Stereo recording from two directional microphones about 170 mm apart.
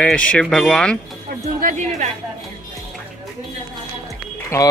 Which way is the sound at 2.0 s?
40° right (ahead or behind).